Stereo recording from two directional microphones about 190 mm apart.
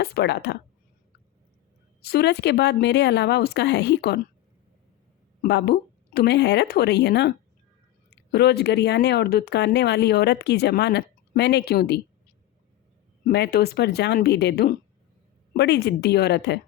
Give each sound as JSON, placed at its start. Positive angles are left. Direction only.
{"t": 0.0, "sound": "speech", "side_deg": 55}
{"t": 2.0, "sound": "speech", "side_deg": 55}
{"t": 5.4, "sound": "speech", "side_deg": 60}
{"t": 13.2, "sound": "speech", "side_deg": 60}